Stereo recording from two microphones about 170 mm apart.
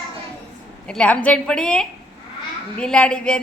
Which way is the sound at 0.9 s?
5° left (ahead or behind).